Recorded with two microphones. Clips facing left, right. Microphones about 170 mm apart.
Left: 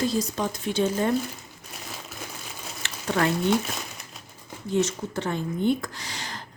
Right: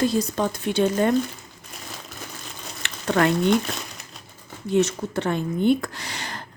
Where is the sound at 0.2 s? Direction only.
55° right (ahead or behind).